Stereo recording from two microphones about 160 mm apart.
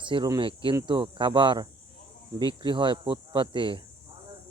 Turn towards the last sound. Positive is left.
turn(degrees=-30)  # may be behind; listen again after turning